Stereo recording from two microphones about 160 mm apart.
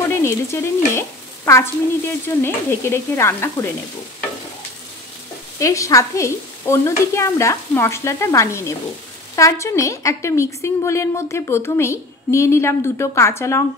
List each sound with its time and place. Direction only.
0.1 s a woman's voice: 15° left (ahead or behind)
5.6 s a woman's voice: 20° left (ahead or behind)